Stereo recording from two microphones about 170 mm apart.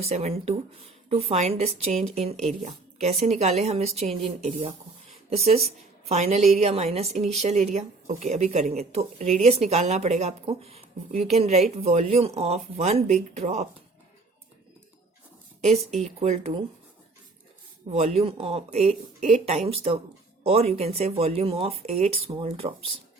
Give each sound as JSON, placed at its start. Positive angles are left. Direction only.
{"t": 0.0, "sound": "a woman's voice", "side_deg": -40}
{"t": 16.0, "sound": "speech", "side_deg": -40}
{"t": 17.8, "sound": "speech", "side_deg": -35}